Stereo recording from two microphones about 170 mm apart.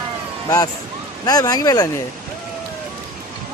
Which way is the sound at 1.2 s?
20° left (ahead or behind).